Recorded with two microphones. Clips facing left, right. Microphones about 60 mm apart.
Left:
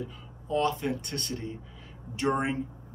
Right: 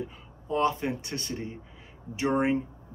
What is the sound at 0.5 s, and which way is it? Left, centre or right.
Speech, right.